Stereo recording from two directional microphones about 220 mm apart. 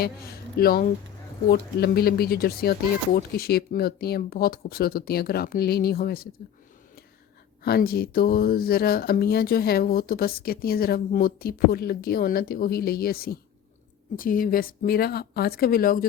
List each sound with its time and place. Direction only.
0.0 s speech: 45° left (ahead or behind)
7.6 s speech: 45° left (ahead or behind)